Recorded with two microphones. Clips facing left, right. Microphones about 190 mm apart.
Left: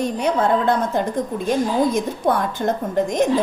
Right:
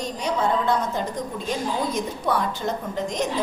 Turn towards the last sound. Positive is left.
turn(degrees=55)  # may be behind; listen again after turning